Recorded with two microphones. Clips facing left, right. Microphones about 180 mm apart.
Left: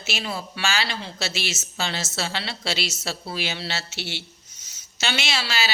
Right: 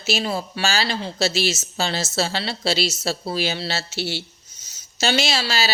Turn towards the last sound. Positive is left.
turn(degrees=-35)  # may be behind; listen again after turning